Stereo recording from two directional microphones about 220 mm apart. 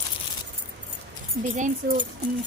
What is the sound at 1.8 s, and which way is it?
Speech, 45° right (ahead or behind).